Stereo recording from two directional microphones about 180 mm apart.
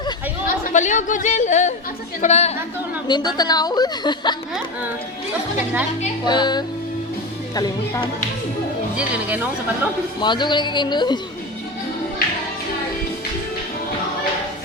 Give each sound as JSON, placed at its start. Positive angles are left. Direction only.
{"t": 0.4, "sound": "a woman's voice", "side_deg": 45}
{"t": 3.1, "sound": "a woman's voice", "side_deg": 20}
{"t": 6.2, "sound": "a woman's voice", "side_deg": 25}
{"t": 9.0, "sound": "speech", "side_deg": -10}
{"t": 10.2, "sound": "a woman's voice", "side_deg": 25}